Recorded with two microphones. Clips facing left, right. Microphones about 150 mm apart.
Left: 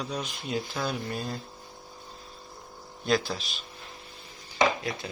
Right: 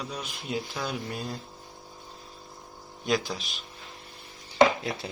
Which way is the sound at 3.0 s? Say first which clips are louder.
Left 1 dB; 15° right (ahead or behind).